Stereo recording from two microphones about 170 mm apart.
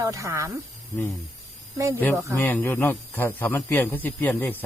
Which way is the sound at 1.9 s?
10° left (ahead or behind).